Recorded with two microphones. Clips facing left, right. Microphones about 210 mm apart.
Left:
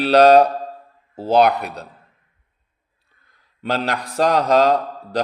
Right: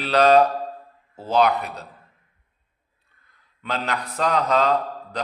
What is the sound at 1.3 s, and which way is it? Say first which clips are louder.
Speech: left 4 dB; 65° left (ahead or behind).